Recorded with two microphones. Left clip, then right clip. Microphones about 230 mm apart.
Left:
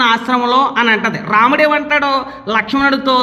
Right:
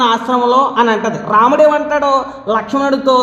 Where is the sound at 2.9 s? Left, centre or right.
Left.